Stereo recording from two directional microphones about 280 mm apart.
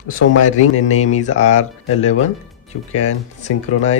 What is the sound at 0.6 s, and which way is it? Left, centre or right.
Speech, left.